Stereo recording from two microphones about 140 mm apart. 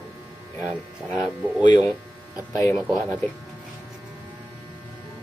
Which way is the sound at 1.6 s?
30° left (ahead or behind).